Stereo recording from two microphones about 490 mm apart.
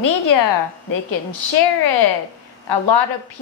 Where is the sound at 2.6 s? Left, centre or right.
Left.